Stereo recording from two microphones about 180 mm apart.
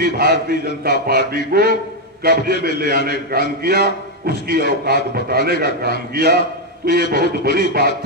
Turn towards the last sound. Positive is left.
turn(degrees=-60)  # may be behind; listen again after turning